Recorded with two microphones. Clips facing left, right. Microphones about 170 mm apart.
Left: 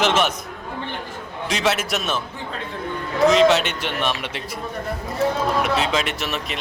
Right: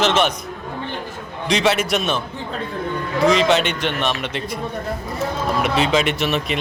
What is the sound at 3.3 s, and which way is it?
Speech, 5° left (ahead or behind).